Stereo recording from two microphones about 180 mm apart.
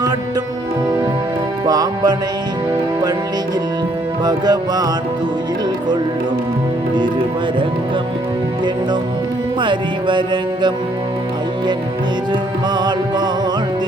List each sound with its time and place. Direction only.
1.6 s music: 20° right (ahead or behind)
4.2 s music: 25° right (ahead or behind)
9.6 s music: 25° right (ahead or behind)
12.7 s music: 25° right (ahead or behind)